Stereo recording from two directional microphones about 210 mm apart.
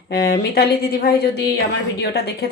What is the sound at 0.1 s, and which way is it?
A woman's voice, 50° left (ahead or behind).